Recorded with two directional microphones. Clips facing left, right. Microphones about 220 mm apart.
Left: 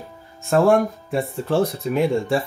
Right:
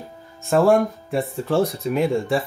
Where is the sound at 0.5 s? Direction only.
Centre (ahead or behind).